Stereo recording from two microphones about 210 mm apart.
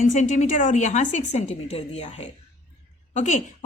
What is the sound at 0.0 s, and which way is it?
Speech, 35° left (ahead or behind).